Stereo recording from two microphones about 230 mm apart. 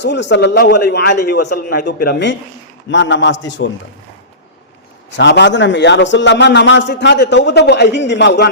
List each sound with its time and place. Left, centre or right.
0.0 s a man's voice: left
5.1 s a man's voice: left